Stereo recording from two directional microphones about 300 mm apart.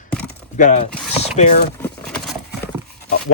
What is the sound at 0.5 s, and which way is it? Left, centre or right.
Speech, left.